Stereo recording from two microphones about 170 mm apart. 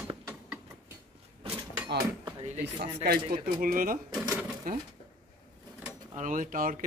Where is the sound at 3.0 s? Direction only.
70° right (ahead or behind).